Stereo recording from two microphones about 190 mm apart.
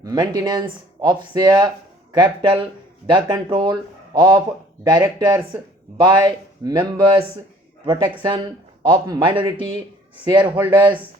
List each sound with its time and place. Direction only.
0.0 s speech: 20° right (ahead or behind)
10.4 s speech: 10° right (ahead or behind)